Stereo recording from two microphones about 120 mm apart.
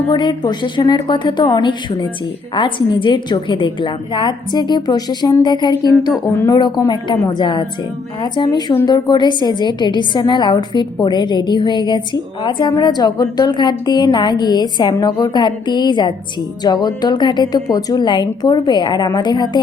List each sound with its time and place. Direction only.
0.1 s a woman's voice: 40° left (ahead or behind)